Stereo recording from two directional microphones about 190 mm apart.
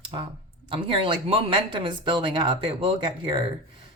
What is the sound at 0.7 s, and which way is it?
A woman's voice, 30° right (ahead or behind).